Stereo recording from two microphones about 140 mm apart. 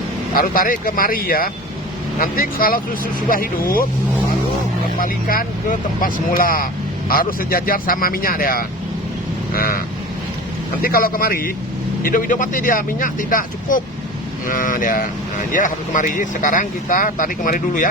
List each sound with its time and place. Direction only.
0.3 s speech: 90° left
4.9 s speech: 85° left
10.8 s speech: 90° left
12.0 s speech: 75° left (ahead or behind)